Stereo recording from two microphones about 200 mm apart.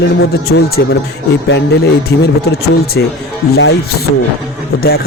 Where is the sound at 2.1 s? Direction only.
55° left (ahead or behind).